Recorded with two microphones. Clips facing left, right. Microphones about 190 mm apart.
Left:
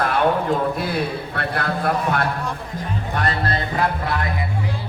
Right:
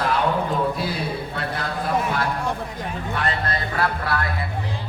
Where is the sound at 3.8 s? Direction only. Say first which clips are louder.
Even; 20° left (ahead or behind).